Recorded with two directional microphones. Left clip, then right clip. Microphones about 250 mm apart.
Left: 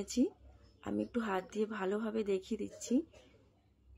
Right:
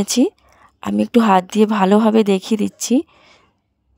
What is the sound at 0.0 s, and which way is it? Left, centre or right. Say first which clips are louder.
Speech: right 18 dB; right.